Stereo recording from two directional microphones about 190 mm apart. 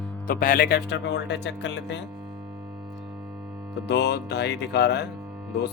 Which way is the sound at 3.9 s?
60° left (ahead or behind).